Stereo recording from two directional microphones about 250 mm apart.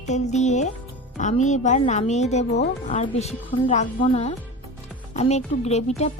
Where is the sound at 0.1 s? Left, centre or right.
Left.